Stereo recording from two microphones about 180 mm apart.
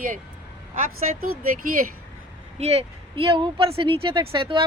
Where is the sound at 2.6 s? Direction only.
35° right (ahead or behind).